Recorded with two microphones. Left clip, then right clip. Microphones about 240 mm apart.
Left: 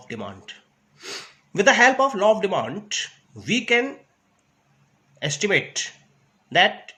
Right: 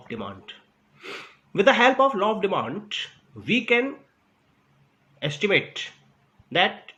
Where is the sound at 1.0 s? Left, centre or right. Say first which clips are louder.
Left 2 dB; left.